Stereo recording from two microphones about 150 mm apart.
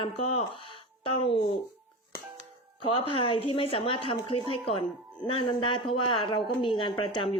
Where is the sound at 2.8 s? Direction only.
35° left (ahead or behind).